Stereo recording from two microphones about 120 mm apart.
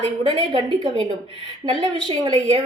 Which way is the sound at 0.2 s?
40° right (ahead or behind).